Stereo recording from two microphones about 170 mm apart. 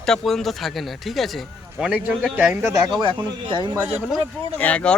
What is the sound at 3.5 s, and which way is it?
Speech, 25° right (ahead or behind).